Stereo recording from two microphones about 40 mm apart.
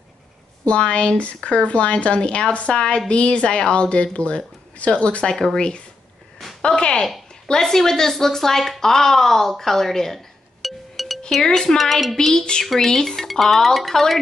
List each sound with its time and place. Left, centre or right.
0.7 s a woman's voice: left
5.2 s speech: centre
6.6 s speech: left; by 11.1 s centre
11.4 s speech: centre
11.8 s speech: centre